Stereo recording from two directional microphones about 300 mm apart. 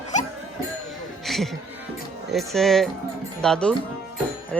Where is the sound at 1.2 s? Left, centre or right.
Centre.